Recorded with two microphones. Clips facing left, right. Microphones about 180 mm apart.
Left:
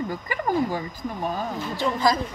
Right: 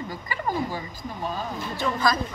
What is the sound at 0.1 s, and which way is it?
Speech, 45° left (ahead or behind).